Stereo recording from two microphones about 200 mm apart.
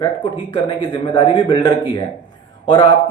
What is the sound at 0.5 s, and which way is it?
Speech, 25° left (ahead or behind).